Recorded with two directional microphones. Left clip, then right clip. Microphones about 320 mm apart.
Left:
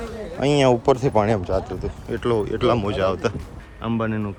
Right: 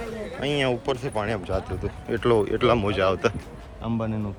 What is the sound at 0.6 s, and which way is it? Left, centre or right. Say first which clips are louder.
Speech: left 9 dB; centre.